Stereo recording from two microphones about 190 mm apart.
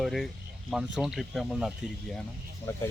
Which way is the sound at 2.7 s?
15° left (ahead or behind).